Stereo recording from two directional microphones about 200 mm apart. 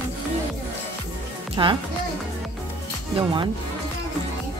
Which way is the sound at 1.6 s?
20° right (ahead or behind).